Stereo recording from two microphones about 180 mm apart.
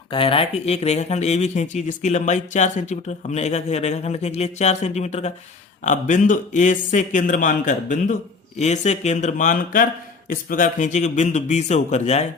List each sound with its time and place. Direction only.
0.1 s a man's voice: 30° left (ahead or behind)